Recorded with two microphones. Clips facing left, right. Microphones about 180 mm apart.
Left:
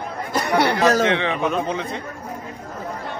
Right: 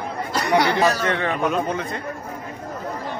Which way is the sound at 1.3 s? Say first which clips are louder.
Even; centre (ahead or behind).